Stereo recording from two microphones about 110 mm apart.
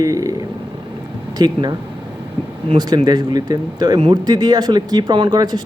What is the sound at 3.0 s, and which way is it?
Speech, 40° right (ahead or behind).